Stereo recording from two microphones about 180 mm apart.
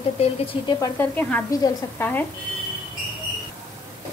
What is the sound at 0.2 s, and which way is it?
Speech, 30° left (ahead or behind).